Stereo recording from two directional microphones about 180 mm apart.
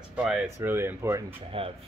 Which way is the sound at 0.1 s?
5° right (ahead or behind).